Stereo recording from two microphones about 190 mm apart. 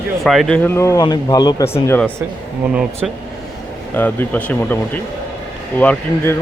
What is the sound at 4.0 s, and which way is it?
Speech, 10° left (ahead or behind).